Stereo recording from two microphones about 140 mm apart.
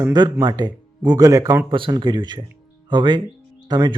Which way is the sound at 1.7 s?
35° right (ahead or behind).